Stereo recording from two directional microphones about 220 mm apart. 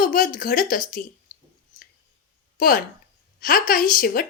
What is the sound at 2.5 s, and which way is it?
Speech, 40° left (ahead or behind).